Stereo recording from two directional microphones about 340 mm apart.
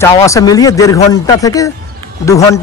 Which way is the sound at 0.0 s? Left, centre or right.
Centre.